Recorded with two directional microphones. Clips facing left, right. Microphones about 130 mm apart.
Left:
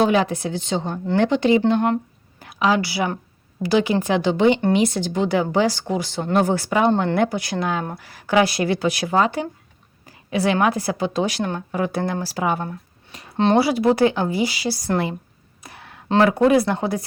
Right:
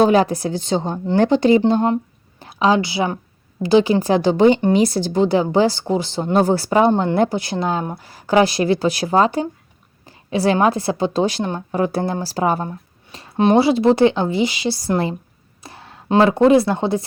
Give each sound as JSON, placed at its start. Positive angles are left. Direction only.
{"t": 0.0, "sound": "a woman's voice", "side_deg": -40}
{"t": 12.6, "sound": "a sound", "side_deg": -30}
{"t": 13.3, "sound": "speech", "side_deg": -15}
{"t": 13.6, "sound": "speech", "side_deg": -25}
{"t": 15.6, "sound": "a sound", "side_deg": -30}
{"t": 16.0, "sound": "speech", "side_deg": -20}